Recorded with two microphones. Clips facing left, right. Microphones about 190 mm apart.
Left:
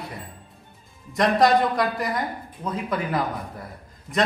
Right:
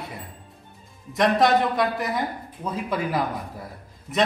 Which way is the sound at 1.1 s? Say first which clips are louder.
Left 1 dB; centre (ahead or behind).